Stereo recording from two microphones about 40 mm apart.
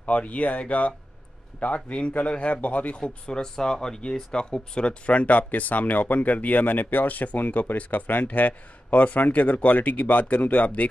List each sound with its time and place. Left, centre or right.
0.0 s a man's voice: left
3.0 s speech: left